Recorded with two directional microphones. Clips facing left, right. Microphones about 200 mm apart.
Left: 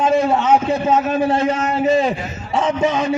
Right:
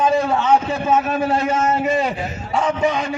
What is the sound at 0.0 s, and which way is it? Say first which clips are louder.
A man's voice: left 2 dB; 20° left (ahead or behind).